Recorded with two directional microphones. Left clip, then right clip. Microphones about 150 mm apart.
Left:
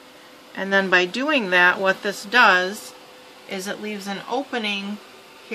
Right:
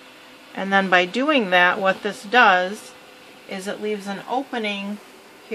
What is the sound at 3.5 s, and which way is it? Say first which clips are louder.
Speech: right 2 dB; 35° right (ahead or behind).